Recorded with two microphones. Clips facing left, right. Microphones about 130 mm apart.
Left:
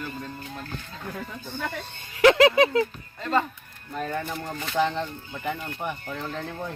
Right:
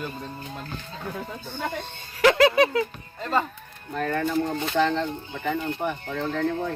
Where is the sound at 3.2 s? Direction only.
5° right (ahead or behind).